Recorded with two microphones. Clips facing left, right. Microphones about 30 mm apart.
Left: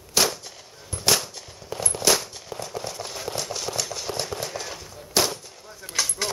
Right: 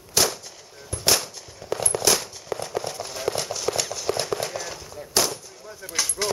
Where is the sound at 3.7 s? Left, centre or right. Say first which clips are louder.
Right 6 dB; right.